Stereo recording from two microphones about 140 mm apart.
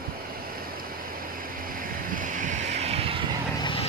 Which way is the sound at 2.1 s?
65° right (ahead or behind).